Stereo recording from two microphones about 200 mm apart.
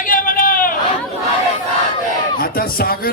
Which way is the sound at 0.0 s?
45° left (ahead or behind).